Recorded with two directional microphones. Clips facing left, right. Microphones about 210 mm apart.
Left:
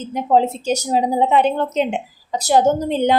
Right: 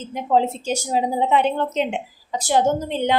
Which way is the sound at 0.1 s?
40° left (ahead or behind).